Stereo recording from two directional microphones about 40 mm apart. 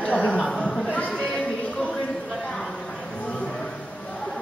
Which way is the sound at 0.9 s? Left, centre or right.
Left.